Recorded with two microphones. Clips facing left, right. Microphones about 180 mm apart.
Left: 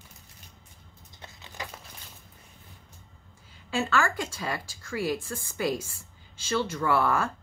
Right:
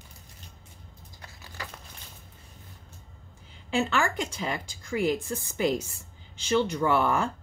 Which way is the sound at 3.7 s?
20° right (ahead or behind).